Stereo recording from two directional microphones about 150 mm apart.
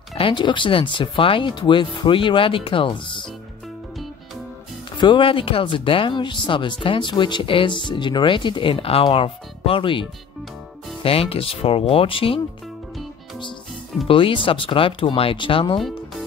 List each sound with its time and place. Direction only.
0.1 s speech: 35° left (ahead or behind)
4.9 s speech: 30° left (ahead or behind)
14.0 s speech: 35° left (ahead or behind)